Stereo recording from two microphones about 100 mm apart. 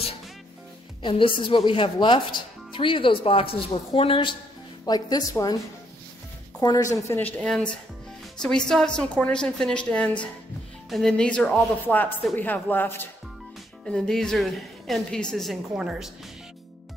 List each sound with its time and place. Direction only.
1.0 s speech: 60° left (ahead or behind)
4.8 s a woman's voice: 40° left (ahead or behind)
6.6 s a woman's voice: 35° left (ahead or behind)
7.2 s a woman's voice: 15° left (ahead or behind)
7.4 s a woman's voice: 5° left (ahead or behind); by 13.1 s 20° left (ahead or behind)
13.8 s a woman's voice: 5° left (ahead or behind)